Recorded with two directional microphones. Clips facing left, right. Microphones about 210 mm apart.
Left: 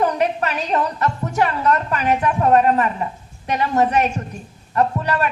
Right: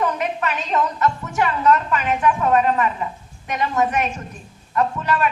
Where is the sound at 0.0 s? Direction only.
35° left (ahead or behind).